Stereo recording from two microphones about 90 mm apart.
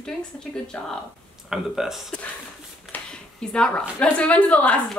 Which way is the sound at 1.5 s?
5° right (ahead or behind).